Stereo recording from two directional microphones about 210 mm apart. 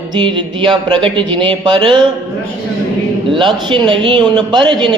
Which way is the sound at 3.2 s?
20° right (ahead or behind).